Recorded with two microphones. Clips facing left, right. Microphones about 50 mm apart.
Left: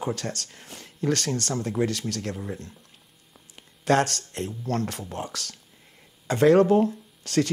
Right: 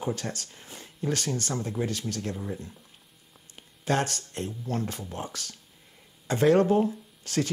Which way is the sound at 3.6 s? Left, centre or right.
Left.